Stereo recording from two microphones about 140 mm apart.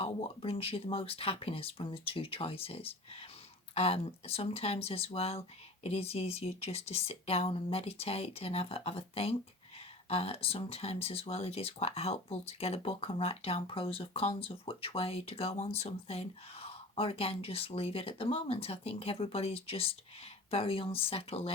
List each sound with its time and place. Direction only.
0.0 s speech: 45° left (ahead or behind)